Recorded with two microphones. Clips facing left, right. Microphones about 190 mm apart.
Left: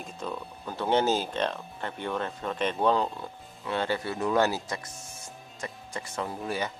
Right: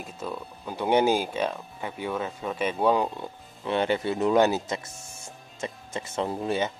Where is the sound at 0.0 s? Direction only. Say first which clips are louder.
Right 1 dB; 5° right (ahead or behind); by 6.7 s 25° right (ahead or behind).